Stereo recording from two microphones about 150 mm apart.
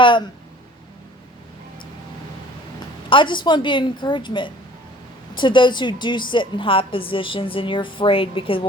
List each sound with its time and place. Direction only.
0.0 s speech: 35° left (ahead or behind)
3.1 s a woman's voice: 35° left (ahead or behind)